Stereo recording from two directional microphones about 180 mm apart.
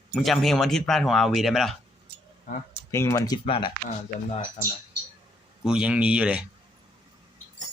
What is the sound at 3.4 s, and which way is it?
Speech, 30° left (ahead or behind).